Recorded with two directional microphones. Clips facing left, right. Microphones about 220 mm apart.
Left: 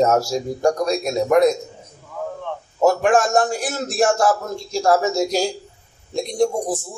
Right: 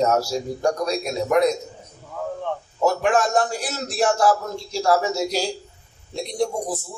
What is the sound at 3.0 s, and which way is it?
Speech, 45° left (ahead or behind).